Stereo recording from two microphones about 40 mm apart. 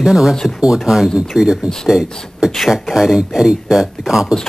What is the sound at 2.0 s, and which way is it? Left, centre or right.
Speech, centre.